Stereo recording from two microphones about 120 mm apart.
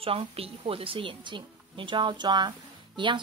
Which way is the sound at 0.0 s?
55° right (ahead or behind).